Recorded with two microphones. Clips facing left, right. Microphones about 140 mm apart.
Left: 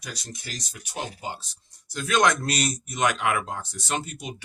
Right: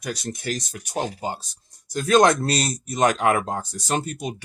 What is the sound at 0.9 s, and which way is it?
Speech, 40° right (ahead or behind).